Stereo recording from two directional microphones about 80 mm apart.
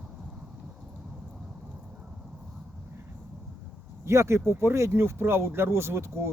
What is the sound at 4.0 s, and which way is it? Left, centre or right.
Speech, right.